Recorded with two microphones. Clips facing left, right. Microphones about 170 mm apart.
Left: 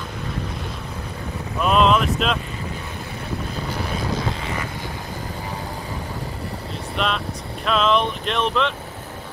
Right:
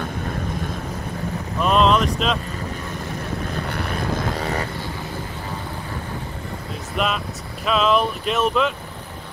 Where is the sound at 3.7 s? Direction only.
60° right (ahead or behind).